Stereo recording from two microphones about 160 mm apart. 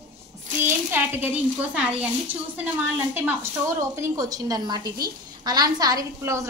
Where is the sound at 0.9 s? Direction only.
15° right (ahead or behind).